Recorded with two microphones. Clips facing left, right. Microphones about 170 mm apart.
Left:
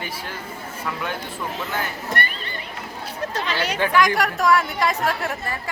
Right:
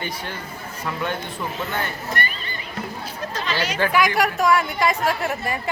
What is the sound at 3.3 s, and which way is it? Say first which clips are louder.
Chatter: even; 60° left (ahead or behind).